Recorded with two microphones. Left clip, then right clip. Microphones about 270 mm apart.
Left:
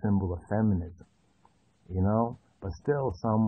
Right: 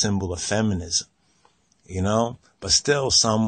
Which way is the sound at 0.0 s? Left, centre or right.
Right.